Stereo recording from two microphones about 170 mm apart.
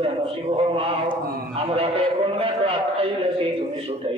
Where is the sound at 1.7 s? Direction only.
35° right (ahead or behind).